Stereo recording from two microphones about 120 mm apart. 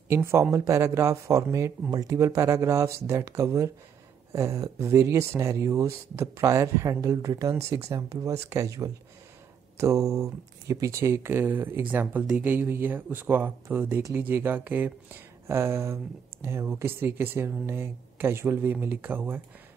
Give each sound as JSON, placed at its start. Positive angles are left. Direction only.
{"t": 0.1, "sound": "speech", "side_deg": -20}